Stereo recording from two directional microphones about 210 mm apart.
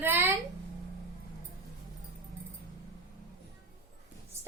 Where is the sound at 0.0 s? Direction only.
10° right (ahead or behind).